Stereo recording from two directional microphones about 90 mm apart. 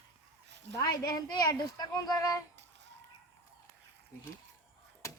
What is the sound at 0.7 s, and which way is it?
Speech, 40° left (ahead or behind).